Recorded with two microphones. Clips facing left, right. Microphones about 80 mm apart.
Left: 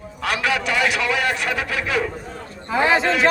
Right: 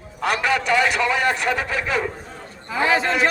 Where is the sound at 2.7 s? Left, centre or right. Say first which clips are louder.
Left 2 dB; left.